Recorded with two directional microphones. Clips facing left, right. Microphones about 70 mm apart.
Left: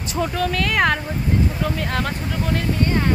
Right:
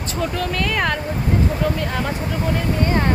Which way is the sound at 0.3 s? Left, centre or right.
Centre.